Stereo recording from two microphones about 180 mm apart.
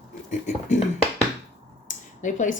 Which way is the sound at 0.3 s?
40° left (ahead or behind).